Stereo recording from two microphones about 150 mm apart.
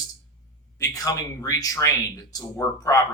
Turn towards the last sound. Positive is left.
turn(degrees=20)  # may be behind; listen again after turning